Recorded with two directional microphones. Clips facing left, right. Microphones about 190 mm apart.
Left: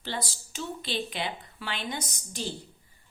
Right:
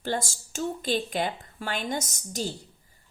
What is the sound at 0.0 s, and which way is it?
A woman's voice, 45° right (ahead or behind).